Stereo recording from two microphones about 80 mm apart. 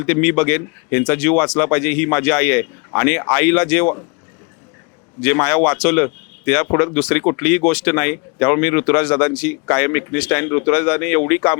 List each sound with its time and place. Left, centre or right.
0.0 s speech: centre
5.2 s speech: centre